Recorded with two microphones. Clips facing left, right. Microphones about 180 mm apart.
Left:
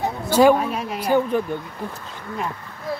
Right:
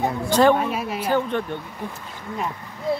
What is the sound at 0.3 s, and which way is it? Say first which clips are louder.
Speech: left 2 dB; 5° left (ahead or behind).